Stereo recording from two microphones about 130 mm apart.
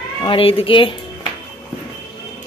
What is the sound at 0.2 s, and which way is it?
Speech, 45° left (ahead or behind).